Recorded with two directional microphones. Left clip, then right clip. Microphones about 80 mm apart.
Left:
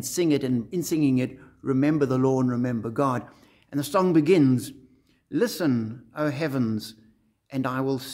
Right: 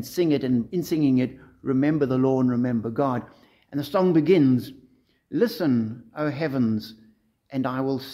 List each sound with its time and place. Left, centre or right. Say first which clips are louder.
0.0 s a man's voice: right 1 dB; left